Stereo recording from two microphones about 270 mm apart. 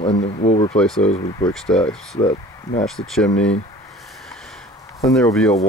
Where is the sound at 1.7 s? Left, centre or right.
Centre.